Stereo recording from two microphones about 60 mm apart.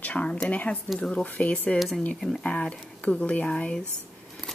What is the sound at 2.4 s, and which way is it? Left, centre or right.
Speech, centre.